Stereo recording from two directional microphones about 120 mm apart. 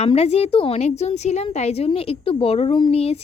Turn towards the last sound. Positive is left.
turn(degrees=55)  # may be behind; listen again after turning